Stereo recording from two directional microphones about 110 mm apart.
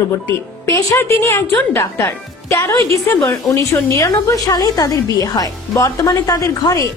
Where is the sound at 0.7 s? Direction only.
25° left (ahead or behind).